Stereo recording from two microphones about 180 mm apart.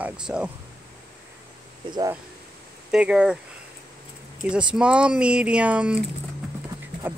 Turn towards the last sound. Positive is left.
turn(degrees=-10)  # may be behind; listen again after turning